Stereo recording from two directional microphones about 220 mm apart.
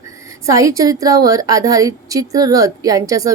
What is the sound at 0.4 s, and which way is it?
Speech, 15° right (ahead or behind).